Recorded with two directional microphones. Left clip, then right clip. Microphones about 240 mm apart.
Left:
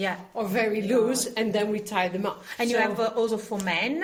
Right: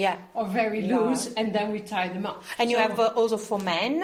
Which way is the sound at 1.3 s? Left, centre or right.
Left.